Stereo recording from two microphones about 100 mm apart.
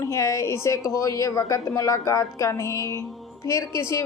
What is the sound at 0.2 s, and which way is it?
A woman's voice, 30° left (ahead or behind).